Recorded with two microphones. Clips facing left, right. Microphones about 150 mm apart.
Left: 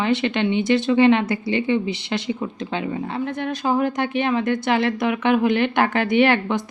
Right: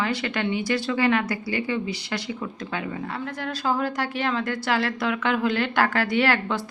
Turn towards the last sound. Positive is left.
turn(degrees=20)  # may be behind; listen again after turning